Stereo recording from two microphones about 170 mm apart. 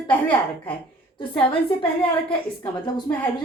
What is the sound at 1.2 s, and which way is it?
Speech, 30° left (ahead or behind).